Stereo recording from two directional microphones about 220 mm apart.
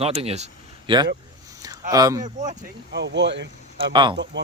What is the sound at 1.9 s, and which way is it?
Speech, 15° right (ahead or behind).